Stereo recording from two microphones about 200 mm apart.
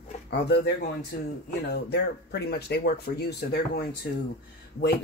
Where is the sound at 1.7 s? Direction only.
55° left (ahead or behind).